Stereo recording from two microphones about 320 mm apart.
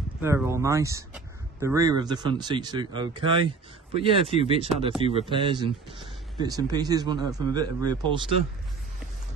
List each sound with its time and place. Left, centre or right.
0.2 s speech: centre